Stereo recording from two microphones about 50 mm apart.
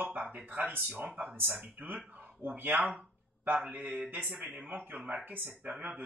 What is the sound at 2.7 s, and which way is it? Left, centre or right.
Speech, right.